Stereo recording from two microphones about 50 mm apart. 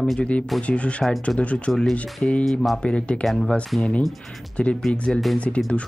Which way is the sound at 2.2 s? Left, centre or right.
Left.